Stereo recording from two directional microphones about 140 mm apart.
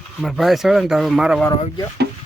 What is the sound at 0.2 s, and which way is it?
Speech, centre (ahead or behind).